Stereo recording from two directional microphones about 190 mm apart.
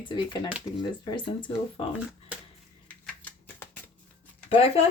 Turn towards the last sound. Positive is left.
turn(degrees=30)  # may be behind; listen again after turning